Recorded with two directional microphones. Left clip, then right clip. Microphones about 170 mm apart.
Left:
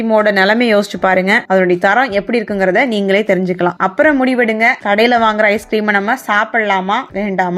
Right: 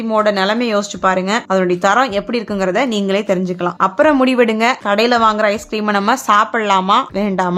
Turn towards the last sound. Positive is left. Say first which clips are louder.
# even
turn(degrees=-10)  # may be behind; listen again after turning